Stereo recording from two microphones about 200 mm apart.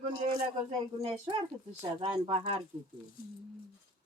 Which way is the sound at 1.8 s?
25° right (ahead or behind).